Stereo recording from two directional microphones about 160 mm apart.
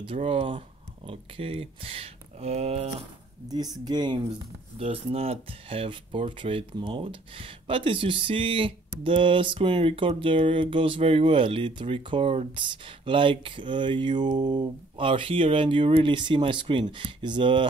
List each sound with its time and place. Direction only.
0.0 s speech: 35° right (ahead or behind)
3.4 s speech: 25° right (ahead or behind)
4.7 s speech: 40° right (ahead or behind)